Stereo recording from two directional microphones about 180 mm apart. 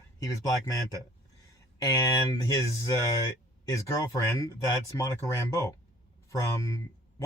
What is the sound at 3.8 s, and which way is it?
Speech, 20° left (ahead or behind).